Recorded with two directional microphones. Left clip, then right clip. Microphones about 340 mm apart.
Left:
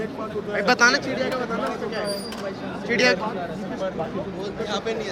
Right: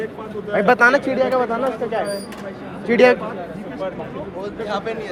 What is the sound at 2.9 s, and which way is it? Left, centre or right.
Speech, centre.